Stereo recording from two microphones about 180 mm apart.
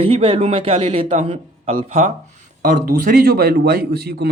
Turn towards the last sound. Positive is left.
turn(degrees=-60)  # may be behind; listen again after turning